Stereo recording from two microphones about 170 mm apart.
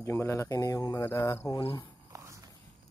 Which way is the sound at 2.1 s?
15° right (ahead or behind).